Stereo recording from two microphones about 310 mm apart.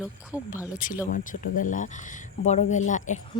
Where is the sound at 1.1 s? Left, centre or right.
Left.